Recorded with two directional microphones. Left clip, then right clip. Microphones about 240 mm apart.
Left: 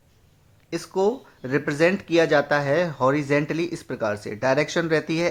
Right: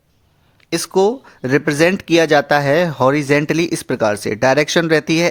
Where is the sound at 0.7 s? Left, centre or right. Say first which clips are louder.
Right 8 dB; right.